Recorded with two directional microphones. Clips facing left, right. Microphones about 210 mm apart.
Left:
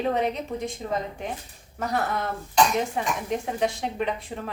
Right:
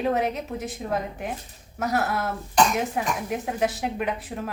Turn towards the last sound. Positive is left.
turn(degrees=-5)  # may be behind; listen again after turning